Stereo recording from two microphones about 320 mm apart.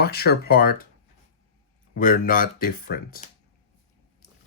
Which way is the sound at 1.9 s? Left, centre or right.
Left.